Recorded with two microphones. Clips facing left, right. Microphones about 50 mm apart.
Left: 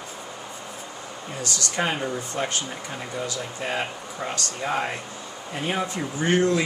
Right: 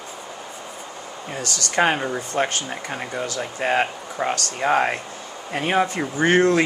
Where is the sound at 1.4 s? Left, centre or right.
Right.